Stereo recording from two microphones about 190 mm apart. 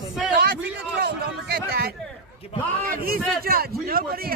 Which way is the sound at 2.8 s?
50° right (ahead or behind).